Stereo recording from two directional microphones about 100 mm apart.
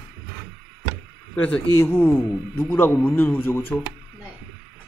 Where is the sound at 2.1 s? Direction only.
20° left (ahead or behind).